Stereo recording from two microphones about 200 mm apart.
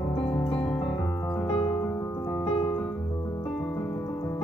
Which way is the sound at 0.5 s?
5° left (ahead or behind).